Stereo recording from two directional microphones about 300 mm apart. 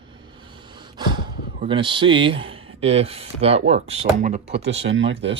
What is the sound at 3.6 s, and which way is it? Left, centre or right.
Speech, right.